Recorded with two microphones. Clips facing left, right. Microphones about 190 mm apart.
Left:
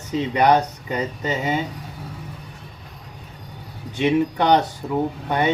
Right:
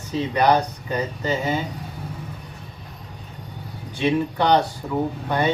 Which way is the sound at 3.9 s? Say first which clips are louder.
Left 2 dB; 20° left (ahead or behind).